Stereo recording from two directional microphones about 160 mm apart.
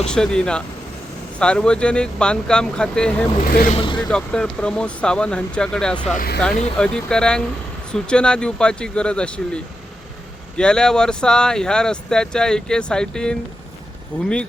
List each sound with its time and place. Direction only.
0.1 s speech: 5° left (ahead or behind)
3.4 s speech: 70° left (ahead or behind)
3.7 s speech: 30° left (ahead or behind)
4.1 s speech: 5° left (ahead or behind)
6.1 s speech: 75° left (ahead or behind)
6.7 s speech: 5° left (ahead or behind)
10.6 s speech: 5° left (ahead or behind)